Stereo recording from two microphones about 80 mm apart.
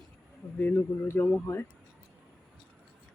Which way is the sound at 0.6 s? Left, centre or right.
Left.